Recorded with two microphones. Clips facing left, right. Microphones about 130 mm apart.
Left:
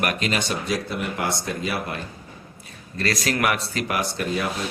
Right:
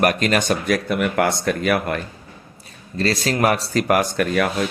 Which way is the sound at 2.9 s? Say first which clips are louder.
Right 4 dB; 30° right (ahead or behind).